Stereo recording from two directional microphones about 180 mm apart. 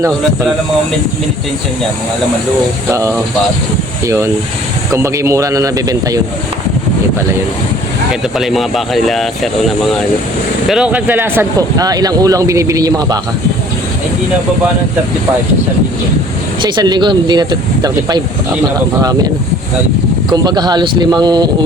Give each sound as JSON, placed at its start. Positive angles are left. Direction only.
{"t": 4.0, "sound": "speech", "side_deg": -15}
{"t": 8.4, "sound": "speech", "side_deg": 0}
{"t": 16.6, "sound": "speech", "side_deg": -25}
{"t": 20.3, "sound": "speech", "side_deg": -20}